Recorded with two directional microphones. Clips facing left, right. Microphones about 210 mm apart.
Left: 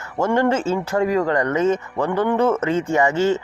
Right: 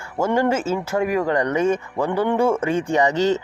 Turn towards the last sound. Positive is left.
turn(degrees=-15)  # may be behind; listen again after turning